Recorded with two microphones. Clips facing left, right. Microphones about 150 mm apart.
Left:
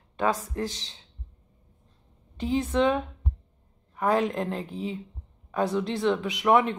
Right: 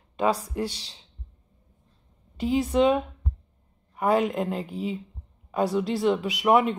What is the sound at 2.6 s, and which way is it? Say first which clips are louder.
Speech: right 3 dB; 15° right (ahead or behind).